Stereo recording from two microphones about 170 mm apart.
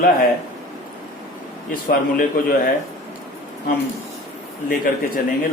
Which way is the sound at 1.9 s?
55° left (ahead or behind).